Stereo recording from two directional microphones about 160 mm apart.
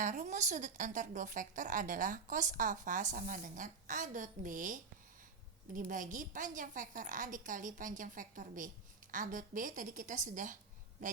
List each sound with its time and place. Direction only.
0.0 s a woman's voice: 50° right (ahead or behind)